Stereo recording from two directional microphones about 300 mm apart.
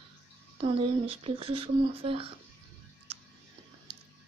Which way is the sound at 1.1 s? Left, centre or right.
Centre.